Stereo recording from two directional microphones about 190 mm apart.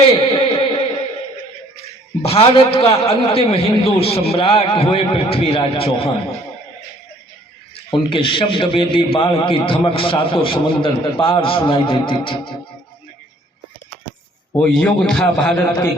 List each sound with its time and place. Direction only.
0.1 s music: 30° left (ahead or behind)
2.2 s a man's voice: 30° left (ahead or behind)
7.9 s a man's voice: 25° left (ahead or behind)
14.5 s a man's voice: 5° left (ahead or behind)